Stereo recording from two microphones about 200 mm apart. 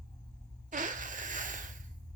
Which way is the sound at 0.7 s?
40° right (ahead or behind).